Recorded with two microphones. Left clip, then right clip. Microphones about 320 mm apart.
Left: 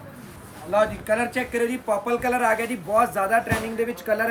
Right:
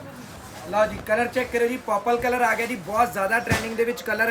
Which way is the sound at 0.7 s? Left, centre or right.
Centre.